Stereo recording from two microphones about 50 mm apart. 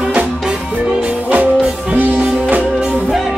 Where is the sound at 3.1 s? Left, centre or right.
Centre.